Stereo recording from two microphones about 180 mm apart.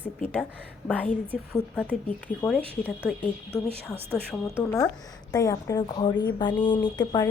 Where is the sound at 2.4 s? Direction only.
15° left (ahead or behind).